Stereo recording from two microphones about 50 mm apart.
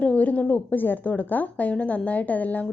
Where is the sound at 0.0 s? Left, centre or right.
Left.